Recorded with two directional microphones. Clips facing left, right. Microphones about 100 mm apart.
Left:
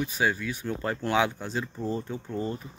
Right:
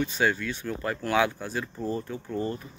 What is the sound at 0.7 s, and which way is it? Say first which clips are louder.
Speech: even; 25° left (ahead or behind).